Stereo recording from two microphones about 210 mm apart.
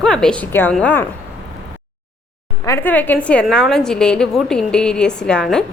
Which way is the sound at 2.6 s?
10° left (ahead or behind).